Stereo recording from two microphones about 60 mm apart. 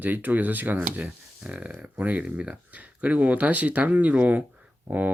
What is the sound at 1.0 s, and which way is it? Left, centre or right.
Speech, centre.